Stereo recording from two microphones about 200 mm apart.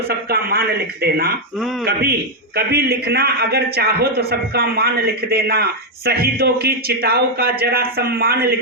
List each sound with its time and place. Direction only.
0.3 s a man's voice: 50° right (ahead or behind)